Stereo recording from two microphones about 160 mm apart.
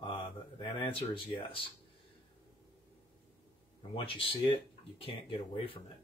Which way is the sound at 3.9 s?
35° left (ahead or behind).